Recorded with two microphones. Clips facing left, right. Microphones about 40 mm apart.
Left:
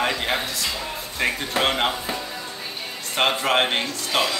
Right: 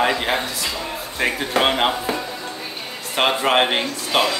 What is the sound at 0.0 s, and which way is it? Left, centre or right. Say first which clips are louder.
Speech: right 4 dB; centre.